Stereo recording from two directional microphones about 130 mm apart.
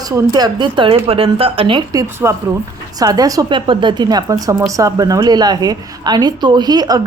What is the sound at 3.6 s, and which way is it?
A woman's voice, 40° right (ahead or behind).